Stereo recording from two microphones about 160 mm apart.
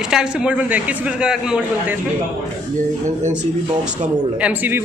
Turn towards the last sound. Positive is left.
turn(degrees=-10)  # may be behind; listen again after turning